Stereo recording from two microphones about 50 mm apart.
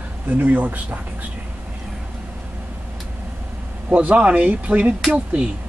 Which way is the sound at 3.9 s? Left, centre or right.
Right.